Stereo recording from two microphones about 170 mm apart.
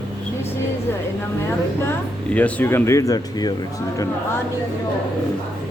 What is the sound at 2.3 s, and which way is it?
Speech, 10° left (ahead or behind).